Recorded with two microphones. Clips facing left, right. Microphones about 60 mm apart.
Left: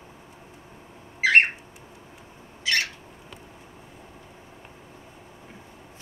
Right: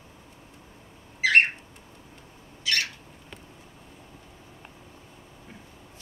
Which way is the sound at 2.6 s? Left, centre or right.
Left.